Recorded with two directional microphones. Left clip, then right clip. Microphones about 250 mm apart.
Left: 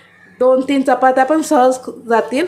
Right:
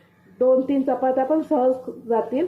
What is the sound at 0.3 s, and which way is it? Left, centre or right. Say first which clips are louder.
Speech: left 6 dB; centre.